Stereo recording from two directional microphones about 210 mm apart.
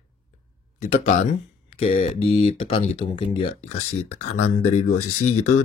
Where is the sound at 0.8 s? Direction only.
30° left (ahead or behind).